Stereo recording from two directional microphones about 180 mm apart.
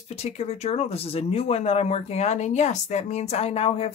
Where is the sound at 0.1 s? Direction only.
35° left (ahead or behind).